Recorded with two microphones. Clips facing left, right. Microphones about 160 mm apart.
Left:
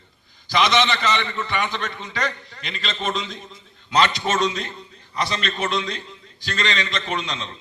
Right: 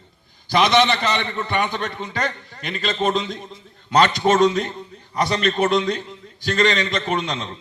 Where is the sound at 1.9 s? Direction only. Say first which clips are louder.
Right 2 dB; 50° right (ahead or behind).